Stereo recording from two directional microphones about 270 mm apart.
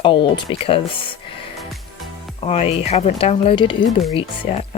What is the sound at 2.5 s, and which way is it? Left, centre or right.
Speech, left.